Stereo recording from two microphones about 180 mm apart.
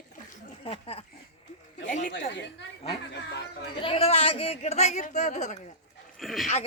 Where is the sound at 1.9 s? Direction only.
45° left (ahead or behind).